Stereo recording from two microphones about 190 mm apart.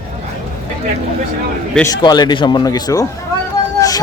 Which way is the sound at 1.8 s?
20° left (ahead or behind).